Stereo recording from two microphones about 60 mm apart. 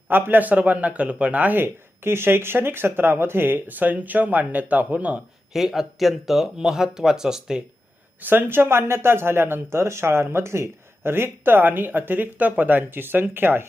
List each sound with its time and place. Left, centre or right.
0.1 s a man's voice: right
5.5 s speech: centre
8.2 s speech: right